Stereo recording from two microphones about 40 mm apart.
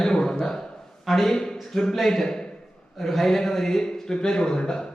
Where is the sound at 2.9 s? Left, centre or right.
Centre.